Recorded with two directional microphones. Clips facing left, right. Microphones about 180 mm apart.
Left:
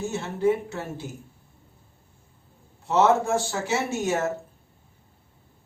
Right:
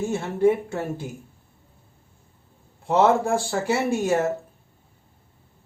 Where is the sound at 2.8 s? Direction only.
55° right (ahead or behind).